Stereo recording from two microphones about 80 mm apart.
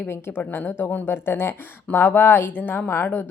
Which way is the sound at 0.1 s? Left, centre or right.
Left.